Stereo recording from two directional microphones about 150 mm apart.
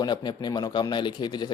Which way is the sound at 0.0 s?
30° left (ahead or behind).